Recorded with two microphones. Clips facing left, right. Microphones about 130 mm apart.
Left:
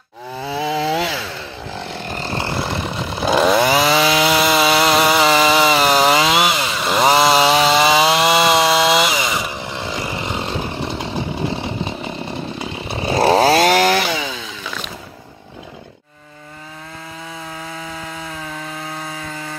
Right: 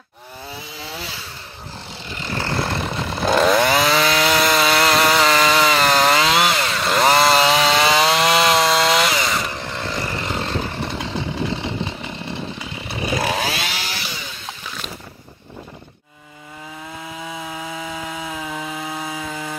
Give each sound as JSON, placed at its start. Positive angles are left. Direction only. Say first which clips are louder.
{"t": 0.4, "sound": "chainsaw", "louder": "left 15 dB", "side_deg": 90}
{"t": 2.0, "sound": "vehicle", "louder": "left 6 dB", "side_deg": 50}
{"t": 2.5, "sound": "chainsaw", "louder": "even", "side_deg": 0}
{"t": 12.8, "sound": "chainsaw", "louder": "left 7 dB", "side_deg": 30}
{"t": 17.9, "sound": "chainsaw", "louder": "right 1 dB", "side_deg": -15}